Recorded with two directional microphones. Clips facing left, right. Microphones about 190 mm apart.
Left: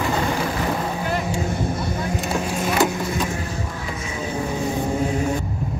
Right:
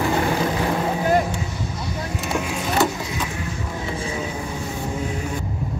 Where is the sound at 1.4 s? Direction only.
50° left (ahead or behind).